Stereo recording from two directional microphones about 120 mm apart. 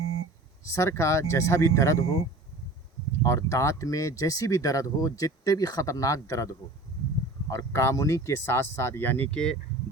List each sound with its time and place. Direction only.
0.7 s speech: 25° left (ahead or behind)
7.5 s speech: 25° left (ahead or behind); by 9.6 s 5° left (ahead or behind)